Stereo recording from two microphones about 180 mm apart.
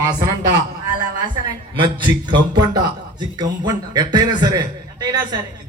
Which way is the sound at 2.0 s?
25° right (ahead or behind).